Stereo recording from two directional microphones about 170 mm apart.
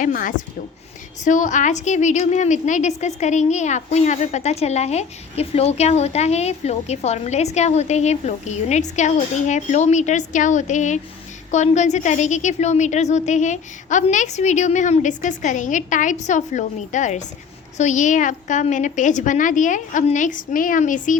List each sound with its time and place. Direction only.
0.0 s a woman's voice: 50° left (ahead or behind)